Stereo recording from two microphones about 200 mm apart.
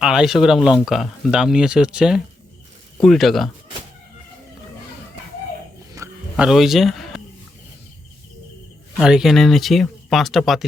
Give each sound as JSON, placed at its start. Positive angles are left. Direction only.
{"t": 0.0, "sound": "speech", "side_deg": -5}
{"t": 6.0, "sound": "wild animals", "side_deg": -15}
{"t": 6.3, "sound": "speech", "side_deg": 0}
{"t": 9.0, "sound": "speech", "side_deg": -5}